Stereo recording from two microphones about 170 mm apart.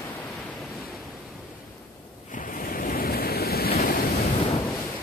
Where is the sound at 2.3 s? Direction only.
50° left (ahead or behind).